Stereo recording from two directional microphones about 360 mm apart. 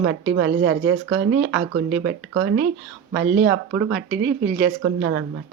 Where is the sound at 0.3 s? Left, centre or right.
Right.